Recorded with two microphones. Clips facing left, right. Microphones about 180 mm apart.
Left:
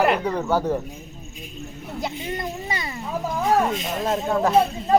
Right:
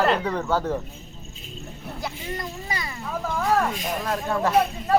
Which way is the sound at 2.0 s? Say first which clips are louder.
Left 3 dB; 20° left (ahead or behind).